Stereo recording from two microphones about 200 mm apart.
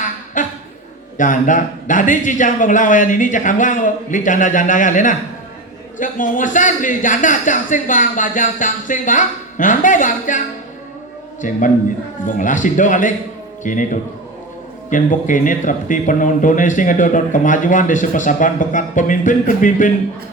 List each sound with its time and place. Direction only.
0.4 s a sound: 40° left (ahead or behind)
1.1 s a man's voice: 40° left (ahead or behind)
11.4 s a man's voice: 40° left (ahead or behind)
14.8 s a man's voice: 40° left (ahead or behind)